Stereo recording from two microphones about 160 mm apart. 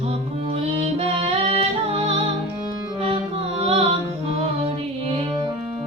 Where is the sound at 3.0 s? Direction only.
35° right (ahead or behind).